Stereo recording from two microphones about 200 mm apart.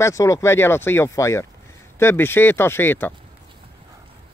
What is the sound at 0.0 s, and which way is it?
Speech, 15° left (ahead or behind).